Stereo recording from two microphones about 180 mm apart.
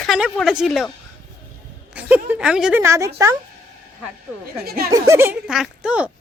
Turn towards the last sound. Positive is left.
turn(degrees=-5)  # may be behind; listen again after turning